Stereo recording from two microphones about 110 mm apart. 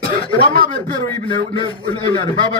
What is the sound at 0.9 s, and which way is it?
Speech, 45° left (ahead or behind).